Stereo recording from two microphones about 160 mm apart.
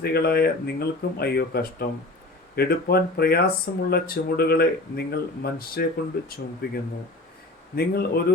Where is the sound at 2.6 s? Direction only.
70° left (ahead or behind).